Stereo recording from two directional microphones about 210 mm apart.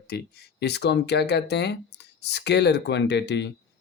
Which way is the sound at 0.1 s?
50° left (ahead or behind).